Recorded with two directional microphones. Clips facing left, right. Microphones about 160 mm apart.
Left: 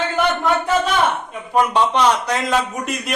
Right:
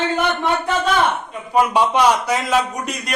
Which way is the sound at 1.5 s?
5° right (ahead or behind).